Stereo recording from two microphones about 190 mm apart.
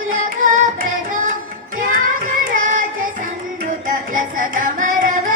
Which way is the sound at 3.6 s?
45° right (ahead or behind).